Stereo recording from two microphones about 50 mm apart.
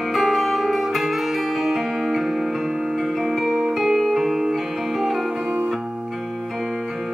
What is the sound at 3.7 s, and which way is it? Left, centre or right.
Music, centre.